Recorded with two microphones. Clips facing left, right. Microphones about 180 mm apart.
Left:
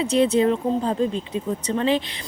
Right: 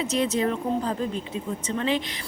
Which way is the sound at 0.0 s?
30° left (ahead or behind).